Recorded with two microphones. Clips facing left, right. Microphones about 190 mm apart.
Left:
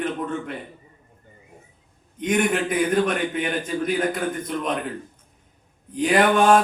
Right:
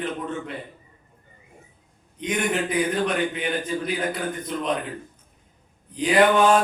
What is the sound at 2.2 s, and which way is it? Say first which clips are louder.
A man's voice: left 3 dB; 45° left (ahead or behind).